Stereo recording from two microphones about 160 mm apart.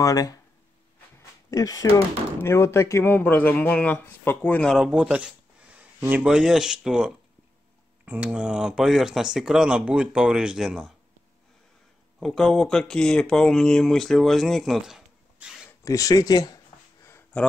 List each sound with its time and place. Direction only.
0.0 s speech: 20° left (ahead or behind)
1.5 s speech: 20° left (ahead or behind); by 10.9 s 5° right (ahead or behind)
12.2 s speech: centre (ahead or behind)
15.8 s a sound: 20° left (ahead or behind)